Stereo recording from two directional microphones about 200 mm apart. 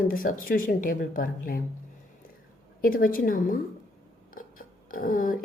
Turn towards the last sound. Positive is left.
turn(degrees=45)  # may be behind; listen again after turning